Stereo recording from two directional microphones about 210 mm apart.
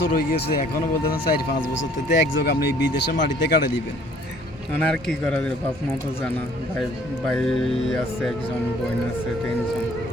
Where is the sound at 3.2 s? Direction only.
50° left (ahead or behind).